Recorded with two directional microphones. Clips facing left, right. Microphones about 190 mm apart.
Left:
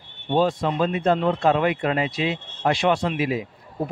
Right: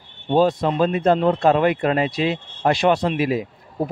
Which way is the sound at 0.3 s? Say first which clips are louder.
Right 3 dB; 40° right (ahead or behind).